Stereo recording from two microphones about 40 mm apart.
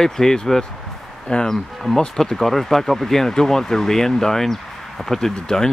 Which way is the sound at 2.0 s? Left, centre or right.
Centre.